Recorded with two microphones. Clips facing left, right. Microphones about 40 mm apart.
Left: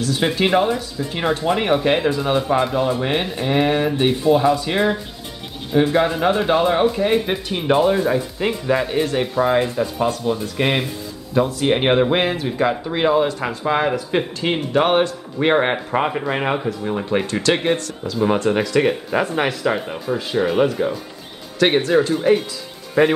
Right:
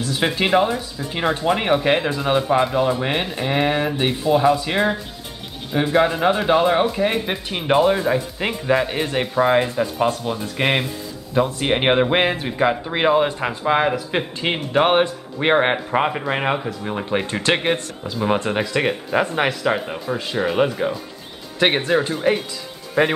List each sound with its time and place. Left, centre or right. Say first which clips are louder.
0.0 s speech: left 2 dB; centre
17.3 s speech: left 1 dB; right
18.1 s speech: left 3 dB; centre